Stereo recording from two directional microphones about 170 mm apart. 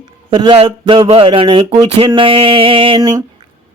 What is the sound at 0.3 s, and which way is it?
A man's voice, 30° right (ahead or behind).